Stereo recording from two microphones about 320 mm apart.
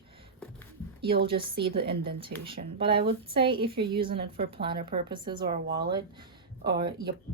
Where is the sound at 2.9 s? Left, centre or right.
Right.